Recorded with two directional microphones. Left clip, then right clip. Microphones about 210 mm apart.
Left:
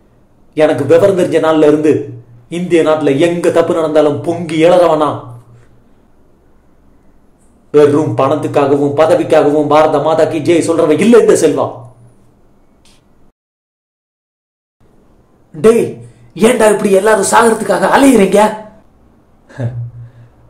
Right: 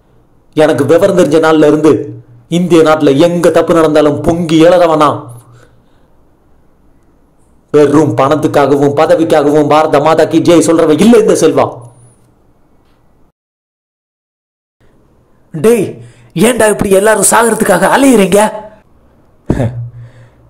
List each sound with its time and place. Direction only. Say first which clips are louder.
0.6 s a man's voice: right 1 dB; 30° right (ahead or behind)
7.7 s a man's voice: right 2 dB; 30° right (ahead or behind)
15.5 s a man's voice: even; 45° right (ahead or behind)